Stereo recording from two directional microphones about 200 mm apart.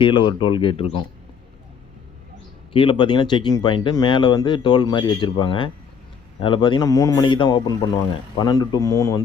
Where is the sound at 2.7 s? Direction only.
25° left (ahead or behind).